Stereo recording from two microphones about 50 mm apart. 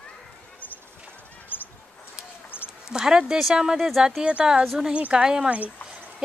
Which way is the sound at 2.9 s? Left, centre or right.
Centre.